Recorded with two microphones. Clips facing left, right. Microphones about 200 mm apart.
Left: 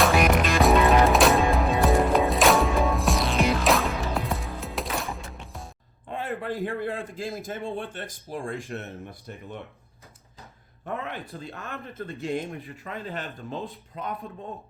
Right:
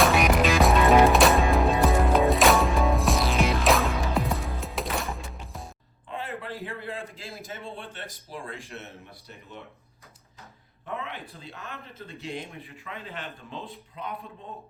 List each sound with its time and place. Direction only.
0.0 s music: centre (ahead or behind)
6.1 s a sound: 50° left (ahead or behind)
7.4 s speech: 50° left (ahead or behind)
10.8 s a man's voice: 45° left (ahead or behind)